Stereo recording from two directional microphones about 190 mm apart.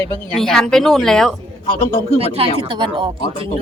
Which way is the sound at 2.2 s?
30° right (ahead or behind).